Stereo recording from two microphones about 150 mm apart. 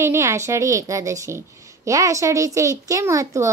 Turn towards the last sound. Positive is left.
turn(degrees=-20)  # may be behind; listen again after turning